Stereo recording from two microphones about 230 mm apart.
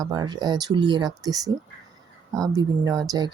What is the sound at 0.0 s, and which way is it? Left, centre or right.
Speech, centre.